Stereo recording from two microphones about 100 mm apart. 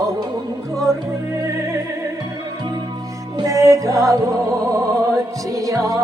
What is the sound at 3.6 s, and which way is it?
Music, 30° right (ahead or behind).